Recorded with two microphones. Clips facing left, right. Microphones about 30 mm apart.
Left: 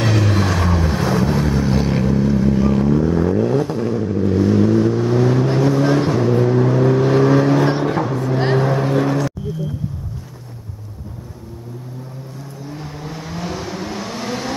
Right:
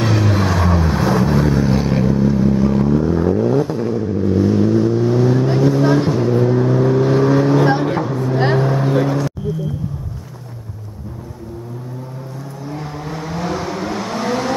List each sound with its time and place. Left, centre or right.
0.0 s vehicle: centre
12.6 s vehicle: centre